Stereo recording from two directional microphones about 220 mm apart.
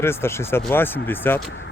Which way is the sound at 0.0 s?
10° left (ahead or behind).